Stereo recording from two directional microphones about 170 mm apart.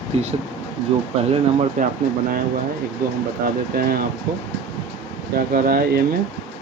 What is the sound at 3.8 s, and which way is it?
Speech, 60° right (ahead or behind).